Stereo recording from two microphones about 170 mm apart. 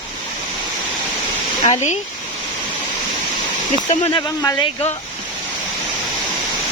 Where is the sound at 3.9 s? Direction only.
30° left (ahead or behind).